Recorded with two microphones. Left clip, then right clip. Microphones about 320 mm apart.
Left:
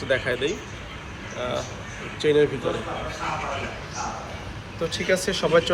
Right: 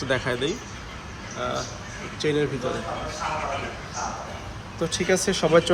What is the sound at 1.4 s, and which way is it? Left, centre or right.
Speech, right.